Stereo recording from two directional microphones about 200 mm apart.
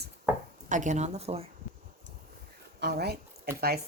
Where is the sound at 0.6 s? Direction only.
40° right (ahead or behind).